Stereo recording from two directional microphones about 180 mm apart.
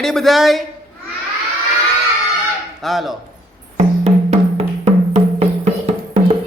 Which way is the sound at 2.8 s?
Centre (ahead or behind).